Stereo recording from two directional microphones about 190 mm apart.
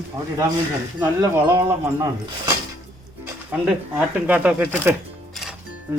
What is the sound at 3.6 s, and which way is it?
Speech, 5° right (ahead or behind).